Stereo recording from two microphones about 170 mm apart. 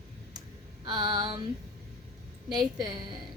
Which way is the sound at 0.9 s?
25° right (ahead or behind).